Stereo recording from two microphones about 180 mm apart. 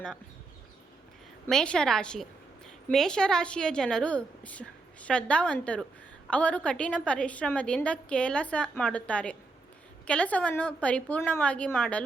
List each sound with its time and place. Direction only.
1.5 s a woman's voice: 5° left (ahead or behind)